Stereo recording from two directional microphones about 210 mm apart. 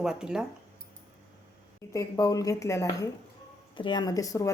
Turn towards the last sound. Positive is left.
turn(degrees=15)  # may be behind; listen again after turning